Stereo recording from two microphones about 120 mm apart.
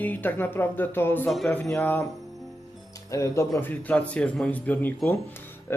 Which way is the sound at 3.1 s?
25° left (ahead or behind).